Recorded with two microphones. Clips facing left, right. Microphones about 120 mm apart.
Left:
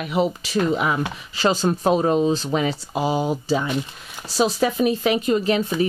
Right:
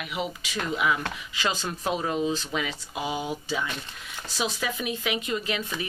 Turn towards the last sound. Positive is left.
turn(degrees=35)  # may be behind; listen again after turning